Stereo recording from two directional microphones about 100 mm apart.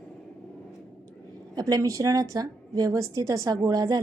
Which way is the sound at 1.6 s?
35° right (ahead or behind).